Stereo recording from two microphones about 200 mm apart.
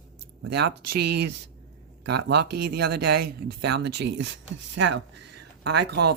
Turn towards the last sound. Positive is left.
turn(degrees=-55)  # may be behind; listen again after turning